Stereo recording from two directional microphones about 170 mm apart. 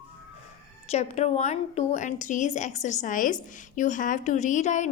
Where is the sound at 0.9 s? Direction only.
40° left (ahead or behind).